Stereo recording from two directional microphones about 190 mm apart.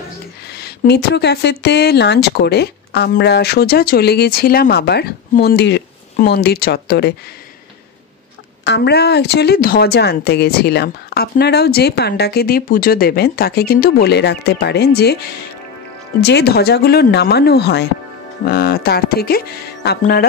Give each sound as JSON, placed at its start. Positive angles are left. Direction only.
{"t": 0.5, "sound": "speech", "side_deg": 60}
{"t": 8.6, "sound": "speech", "side_deg": 60}
{"t": 16.2, "sound": "speech", "side_deg": 60}